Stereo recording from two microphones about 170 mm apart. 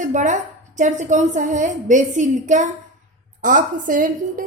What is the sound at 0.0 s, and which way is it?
A woman's voice, 45° right (ahead or behind).